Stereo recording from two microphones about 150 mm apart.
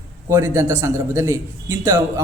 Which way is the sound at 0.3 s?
15° right (ahead or behind).